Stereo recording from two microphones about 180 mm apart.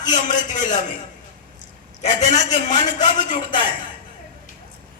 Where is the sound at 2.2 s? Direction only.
40° left (ahead or behind).